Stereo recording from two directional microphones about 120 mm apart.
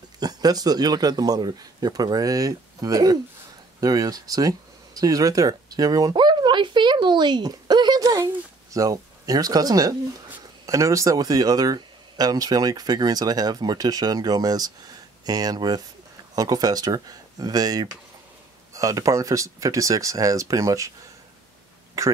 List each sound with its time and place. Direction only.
0.2 s speech: 35° right (ahead or behind)
3.8 s a sound: 30° right (ahead or behind)
10.7 s speech: 25° right (ahead or behind)